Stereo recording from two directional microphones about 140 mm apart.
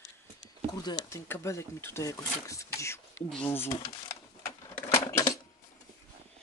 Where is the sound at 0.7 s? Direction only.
25° left (ahead or behind).